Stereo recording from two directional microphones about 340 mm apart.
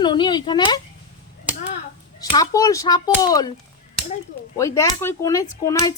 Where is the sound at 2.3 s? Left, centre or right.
Centre.